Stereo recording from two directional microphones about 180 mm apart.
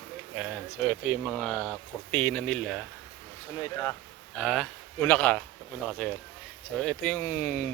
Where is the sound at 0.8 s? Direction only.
Centre (ahead or behind).